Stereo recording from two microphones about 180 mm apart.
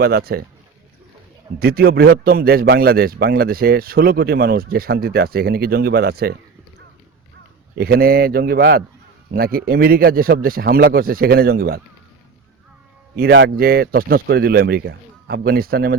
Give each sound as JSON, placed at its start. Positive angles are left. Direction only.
{"t": 0.0, "sound": "a man's voice", "side_deg": -60}
{"t": 1.5, "sound": "a man's voice", "side_deg": -60}
{"t": 7.8, "sound": "a man's voice", "side_deg": -60}
{"t": 13.1, "sound": "a man's voice", "side_deg": -75}